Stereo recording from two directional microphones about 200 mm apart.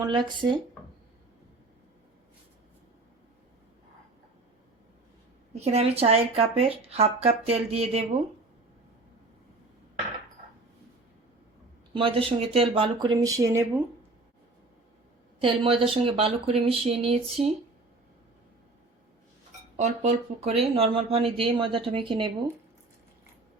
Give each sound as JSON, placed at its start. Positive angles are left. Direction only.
{"t": 0.0, "sound": "speech", "side_deg": -25}
{"t": 5.5, "sound": "a woman's voice", "side_deg": -35}
{"t": 11.9, "sound": "speech", "side_deg": -25}
{"t": 15.4, "sound": "speech", "side_deg": -25}
{"t": 19.7, "sound": "speech", "side_deg": -35}